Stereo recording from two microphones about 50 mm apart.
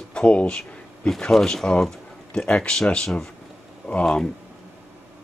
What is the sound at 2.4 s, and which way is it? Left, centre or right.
Speech, left.